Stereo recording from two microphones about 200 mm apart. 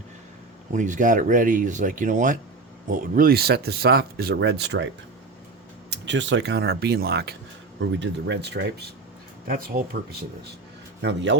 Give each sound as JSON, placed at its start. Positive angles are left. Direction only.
{"t": 0.7, "sound": "speech", "side_deg": -40}
{"t": 5.9, "sound": "speech", "side_deg": -65}
{"t": 7.8, "sound": "speech", "side_deg": -65}
{"t": 9.5, "sound": "speech", "side_deg": -45}
{"t": 11.0, "sound": "speech", "side_deg": -60}